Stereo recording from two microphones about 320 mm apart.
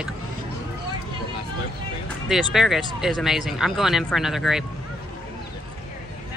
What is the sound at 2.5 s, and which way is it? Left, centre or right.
Speech, centre.